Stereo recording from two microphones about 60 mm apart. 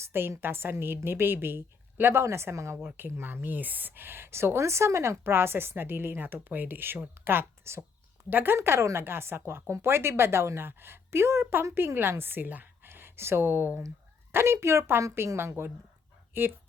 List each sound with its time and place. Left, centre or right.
0.0 s a woman's voice: right
2.8 s a woman's voice: right
8.3 s speech: right
8.5 s a woman's voice: right
12.9 s a woman's voice: right